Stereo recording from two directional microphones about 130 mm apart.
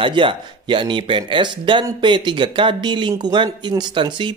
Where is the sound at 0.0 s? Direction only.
40° right (ahead or behind).